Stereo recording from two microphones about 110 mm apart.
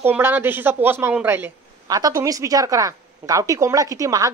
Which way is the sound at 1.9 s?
35° right (ahead or behind).